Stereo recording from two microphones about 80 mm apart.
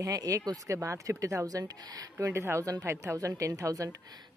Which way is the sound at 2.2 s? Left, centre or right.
Right.